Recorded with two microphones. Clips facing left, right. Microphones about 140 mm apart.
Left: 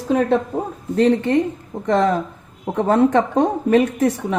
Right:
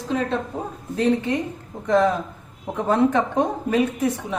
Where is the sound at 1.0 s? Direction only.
75° left (ahead or behind).